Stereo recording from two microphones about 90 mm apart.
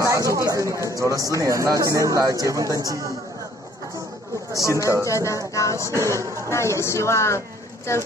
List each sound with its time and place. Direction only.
0.0 s speech: 35° right (ahead or behind)
4.6 s speech: 35° left (ahead or behind)
5.9 s speech: 35° right (ahead or behind)
6.5 s speech: 30° left (ahead or behind)